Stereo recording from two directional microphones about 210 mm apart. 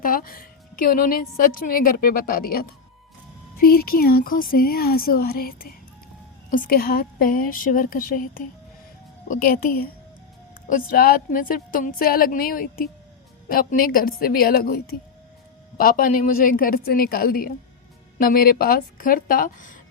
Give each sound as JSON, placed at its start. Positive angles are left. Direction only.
{"t": 0.0, "sound": "a woman's voice", "side_deg": 45}
{"t": 15.8, "sound": "a woman's voice", "side_deg": 45}